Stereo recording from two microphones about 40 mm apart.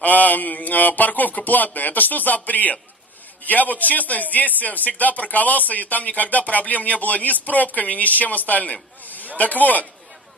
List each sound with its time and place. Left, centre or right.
0.0 s speech: left
9.0 s a sound: left
9.4 s speech: left